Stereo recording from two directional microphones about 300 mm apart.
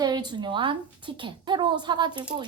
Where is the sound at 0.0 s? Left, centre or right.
Centre.